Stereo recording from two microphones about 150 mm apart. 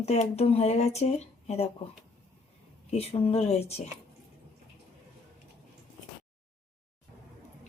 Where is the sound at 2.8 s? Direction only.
40° left (ahead or behind).